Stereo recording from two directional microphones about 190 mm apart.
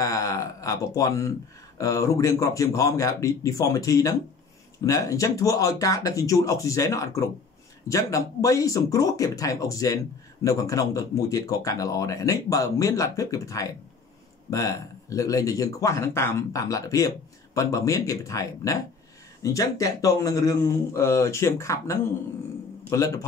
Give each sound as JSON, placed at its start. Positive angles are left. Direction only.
{"t": 0.0, "sound": "speech", "side_deg": 15}